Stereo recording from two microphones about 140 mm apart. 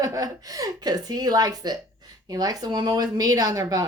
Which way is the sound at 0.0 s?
25° right (ahead or behind).